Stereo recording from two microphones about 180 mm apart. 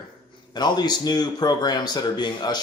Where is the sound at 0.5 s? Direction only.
25° left (ahead or behind).